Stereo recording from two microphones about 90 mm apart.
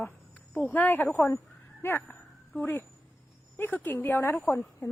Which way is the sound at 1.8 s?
20° left (ahead or behind).